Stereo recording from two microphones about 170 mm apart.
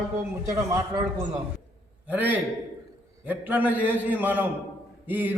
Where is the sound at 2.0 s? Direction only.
10° right (ahead or behind).